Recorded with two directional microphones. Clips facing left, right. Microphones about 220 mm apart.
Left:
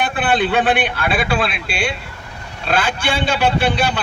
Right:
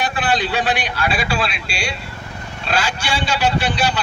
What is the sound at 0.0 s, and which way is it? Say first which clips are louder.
A man's voice: left 3 dB; 55° left (ahead or behind).